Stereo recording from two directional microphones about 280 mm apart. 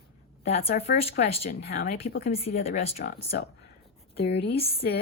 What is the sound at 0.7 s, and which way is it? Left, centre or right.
A woman's voice, left.